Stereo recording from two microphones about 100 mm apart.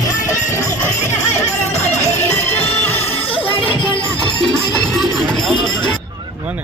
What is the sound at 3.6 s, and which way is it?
Children playing, 65° left (ahead or behind).